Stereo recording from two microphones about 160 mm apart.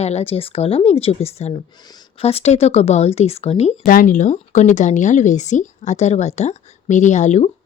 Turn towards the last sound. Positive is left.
turn(degrees=45)  # may be behind; listen again after turning